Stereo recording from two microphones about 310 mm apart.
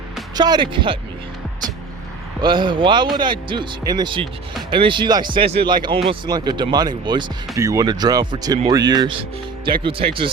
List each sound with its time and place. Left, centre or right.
0.3 s speech: centre
2.4 s speech: centre